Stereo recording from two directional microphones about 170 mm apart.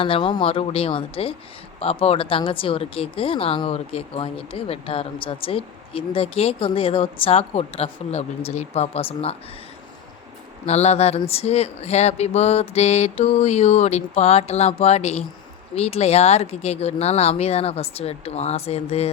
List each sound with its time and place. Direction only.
0.0 s speech: 30° left (ahead or behind)
10.7 s speech: 40° left (ahead or behind)